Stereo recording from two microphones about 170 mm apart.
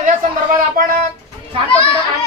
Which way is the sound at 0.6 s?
55° right (ahead or behind).